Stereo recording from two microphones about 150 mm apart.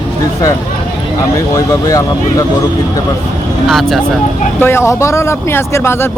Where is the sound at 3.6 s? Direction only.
Centre (ahead or behind).